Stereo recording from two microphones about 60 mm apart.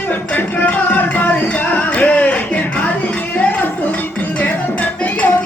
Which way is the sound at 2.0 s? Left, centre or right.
Left.